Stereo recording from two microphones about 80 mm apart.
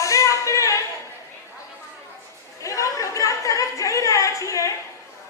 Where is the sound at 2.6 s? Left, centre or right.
Left.